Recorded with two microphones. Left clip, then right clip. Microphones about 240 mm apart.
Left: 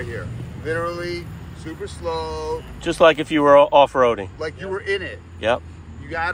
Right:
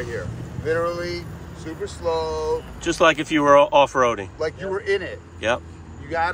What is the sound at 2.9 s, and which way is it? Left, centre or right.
Speech, centre.